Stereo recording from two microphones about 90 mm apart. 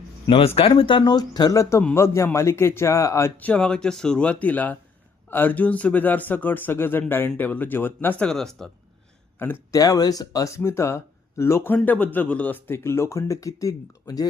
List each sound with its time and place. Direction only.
0.3 s speech: 90° left; by 1.1 s 70° left (ahead or behind)
1.1 s speech: 50° left (ahead or behind)
2.0 s speech: 30° left (ahead or behind)
3.3 s speech: 15° left (ahead or behind)
8.2 s speech: 5° left (ahead or behind)
9.4 s speech: 25° left (ahead or behind)
9.7 s speech: 40° left (ahead or behind)